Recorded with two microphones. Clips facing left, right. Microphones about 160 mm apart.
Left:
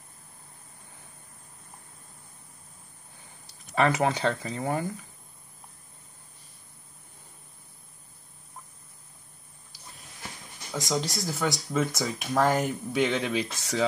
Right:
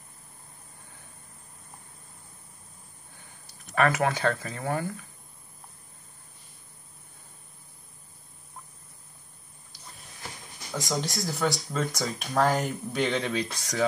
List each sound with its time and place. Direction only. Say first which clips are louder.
3.7 s speech: even; 25° left (ahead or behind)
10.7 s speech: left 1 dB; centre (ahead or behind)